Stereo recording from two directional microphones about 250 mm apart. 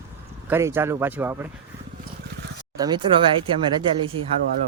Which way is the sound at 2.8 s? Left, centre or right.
Centre.